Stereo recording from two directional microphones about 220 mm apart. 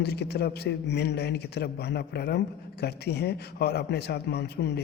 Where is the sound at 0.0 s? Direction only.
50° left (ahead or behind).